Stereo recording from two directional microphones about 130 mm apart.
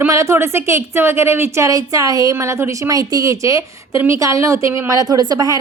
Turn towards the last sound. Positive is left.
turn(degrees=-30)  # may be behind; listen again after turning